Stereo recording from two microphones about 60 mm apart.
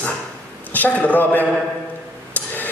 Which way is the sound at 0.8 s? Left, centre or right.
Left.